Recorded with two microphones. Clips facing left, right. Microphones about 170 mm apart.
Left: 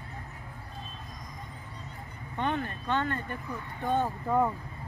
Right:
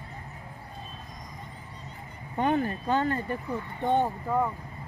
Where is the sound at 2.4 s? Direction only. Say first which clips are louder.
Right 5 dB; 40° right (ahead or behind).